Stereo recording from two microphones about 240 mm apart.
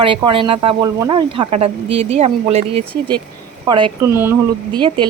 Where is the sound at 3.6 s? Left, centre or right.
Centre.